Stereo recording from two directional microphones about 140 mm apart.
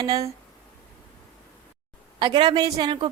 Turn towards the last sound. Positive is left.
turn(degrees=-35)  # may be behind; listen again after turning